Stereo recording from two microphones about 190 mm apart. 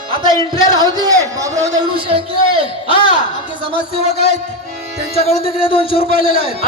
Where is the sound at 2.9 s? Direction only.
25° left (ahead or behind).